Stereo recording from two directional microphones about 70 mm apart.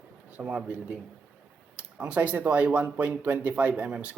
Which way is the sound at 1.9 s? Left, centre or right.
Centre.